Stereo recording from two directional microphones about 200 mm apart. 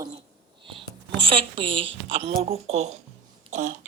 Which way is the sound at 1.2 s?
25° right (ahead or behind).